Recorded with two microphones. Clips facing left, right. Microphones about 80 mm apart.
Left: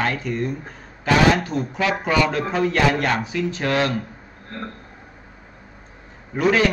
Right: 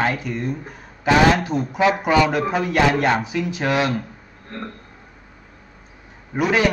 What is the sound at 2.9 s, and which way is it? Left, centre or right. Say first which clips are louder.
A man's voice: right 3 dB; centre.